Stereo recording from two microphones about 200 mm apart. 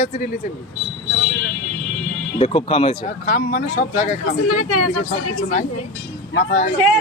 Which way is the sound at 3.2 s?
45° left (ahead or behind).